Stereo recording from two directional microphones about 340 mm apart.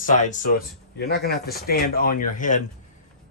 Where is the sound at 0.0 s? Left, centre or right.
Left.